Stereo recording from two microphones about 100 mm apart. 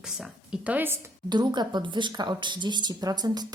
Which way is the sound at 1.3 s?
45° right (ahead or behind).